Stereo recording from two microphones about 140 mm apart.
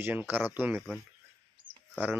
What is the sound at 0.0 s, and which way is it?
Speech, 15° right (ahead or behind).